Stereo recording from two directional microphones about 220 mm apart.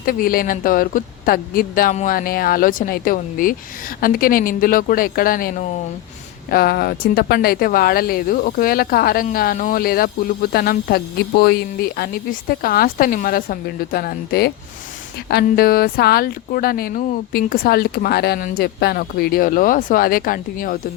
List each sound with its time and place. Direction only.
0.0 s speech: 40° left (ahead or behind)